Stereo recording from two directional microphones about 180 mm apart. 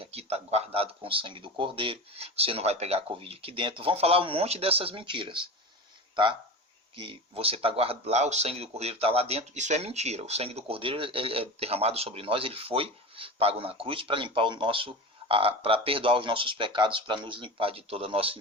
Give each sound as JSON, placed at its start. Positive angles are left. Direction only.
{"t": 0.0, "sound": "speech", "side_deg": -35}
{"t": 6.9, "sound": "speech", "side_deg": -30}